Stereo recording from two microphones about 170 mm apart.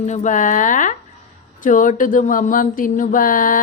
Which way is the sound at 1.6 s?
50° left (ahead or behind).